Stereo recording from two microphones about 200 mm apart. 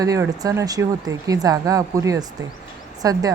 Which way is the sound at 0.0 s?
15° right (ahead or behind).